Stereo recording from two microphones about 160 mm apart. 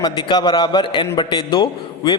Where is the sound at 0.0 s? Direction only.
25° left (ahead or behind).